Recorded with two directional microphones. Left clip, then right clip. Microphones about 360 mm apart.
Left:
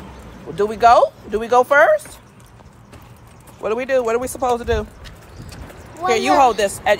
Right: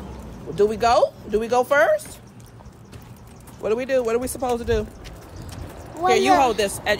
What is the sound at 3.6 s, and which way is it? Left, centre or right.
Speech, centre.